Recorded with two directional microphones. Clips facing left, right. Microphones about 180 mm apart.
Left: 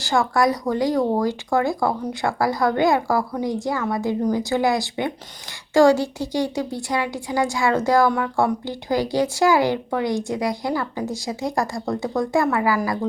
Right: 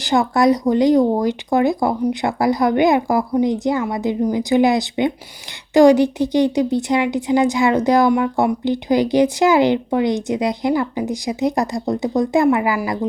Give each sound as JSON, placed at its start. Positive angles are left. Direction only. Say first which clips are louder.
{"t": 0.0, "sound": "a woman's voice", "louder": "right 4 dB", "side_deg": -20}